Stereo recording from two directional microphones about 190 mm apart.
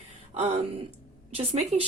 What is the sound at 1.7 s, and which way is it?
Speech, 35° right (ahead or behind).